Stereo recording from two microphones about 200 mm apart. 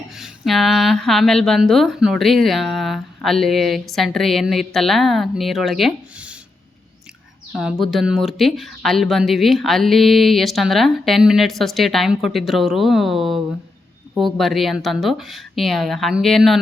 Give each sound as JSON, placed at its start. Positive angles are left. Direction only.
{"t": 0.2, "sound": "speech", "side_deg": 0}
{"t": 7.5, "sound": "speech", "side_deg": 0}